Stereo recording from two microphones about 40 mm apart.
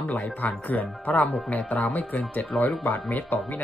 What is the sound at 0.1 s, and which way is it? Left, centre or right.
Speech, left.